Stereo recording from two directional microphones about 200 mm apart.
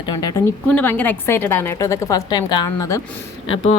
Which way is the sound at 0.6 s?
10° left (ahead or behind).